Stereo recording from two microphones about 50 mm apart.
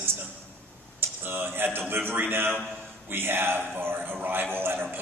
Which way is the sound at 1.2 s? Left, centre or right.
Right.